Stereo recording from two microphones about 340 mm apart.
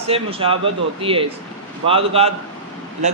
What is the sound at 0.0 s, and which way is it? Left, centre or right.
Speech, centre.